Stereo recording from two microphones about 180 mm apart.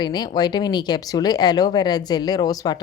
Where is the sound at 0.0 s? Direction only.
25° left (ahead or behind).